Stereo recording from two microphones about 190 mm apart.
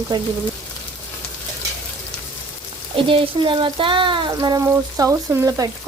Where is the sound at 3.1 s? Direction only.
25° right (ahead or behind).